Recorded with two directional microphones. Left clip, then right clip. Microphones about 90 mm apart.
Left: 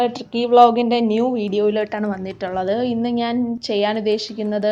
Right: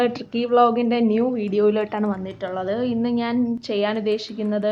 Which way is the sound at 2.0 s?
35° left (ahead or behind).